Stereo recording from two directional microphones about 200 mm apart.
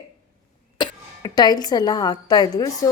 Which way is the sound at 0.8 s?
20° left (ahead or behind).